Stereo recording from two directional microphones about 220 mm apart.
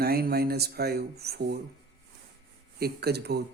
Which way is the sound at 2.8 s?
45° right (ahead or behind).